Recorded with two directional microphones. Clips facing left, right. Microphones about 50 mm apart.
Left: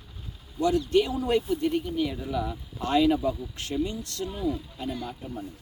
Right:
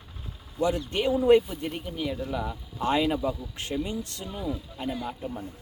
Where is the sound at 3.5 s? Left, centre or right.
Right.